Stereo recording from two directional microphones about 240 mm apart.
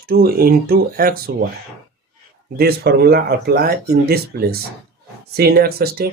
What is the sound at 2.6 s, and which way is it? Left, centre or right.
Speech, right.